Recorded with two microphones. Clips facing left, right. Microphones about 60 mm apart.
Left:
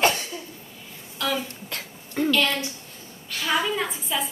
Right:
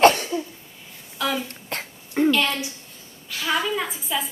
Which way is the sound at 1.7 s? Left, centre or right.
Right.